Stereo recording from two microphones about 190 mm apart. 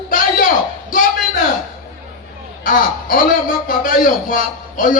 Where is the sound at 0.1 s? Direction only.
45° left (ahead or behind).